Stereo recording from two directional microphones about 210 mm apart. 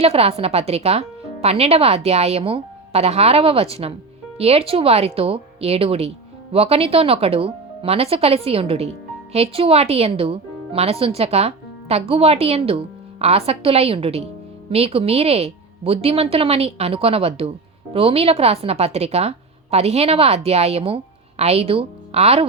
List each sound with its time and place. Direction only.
0.0 s a woman's voice: 30° right (ahead or behind)